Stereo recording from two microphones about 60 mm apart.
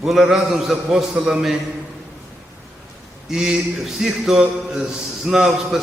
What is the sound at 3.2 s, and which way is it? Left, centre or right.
Speech, centre.